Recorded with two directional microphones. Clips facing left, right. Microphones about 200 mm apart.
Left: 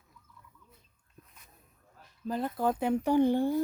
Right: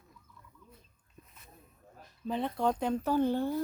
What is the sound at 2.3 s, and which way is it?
Speech, centre (ahead or behind).